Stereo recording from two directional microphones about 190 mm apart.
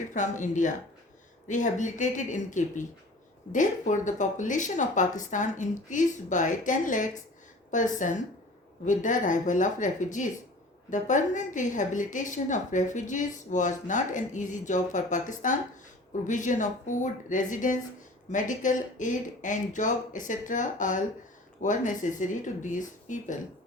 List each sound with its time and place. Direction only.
0.1 s a woman's voice: 40° left (ahead or behind)